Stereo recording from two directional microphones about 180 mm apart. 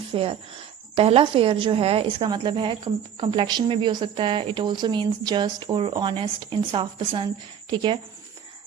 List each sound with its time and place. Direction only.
0.1 s a woman's voice: 30° right (ahead or behind)